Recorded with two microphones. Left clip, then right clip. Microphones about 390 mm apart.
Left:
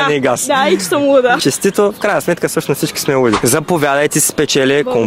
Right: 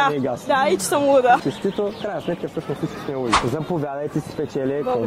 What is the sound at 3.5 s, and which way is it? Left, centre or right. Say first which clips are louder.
A man's voice: left 12 dB; left.